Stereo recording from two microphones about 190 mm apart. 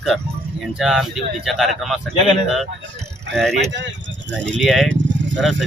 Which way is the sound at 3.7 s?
70° right (ahead or behind).